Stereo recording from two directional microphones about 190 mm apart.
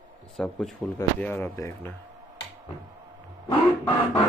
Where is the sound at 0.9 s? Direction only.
10° left (ahead or behind).